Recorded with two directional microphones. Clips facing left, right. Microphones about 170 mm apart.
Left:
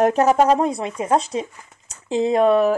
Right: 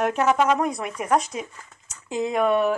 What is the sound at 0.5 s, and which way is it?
Speech, 25° left (ahead or behind).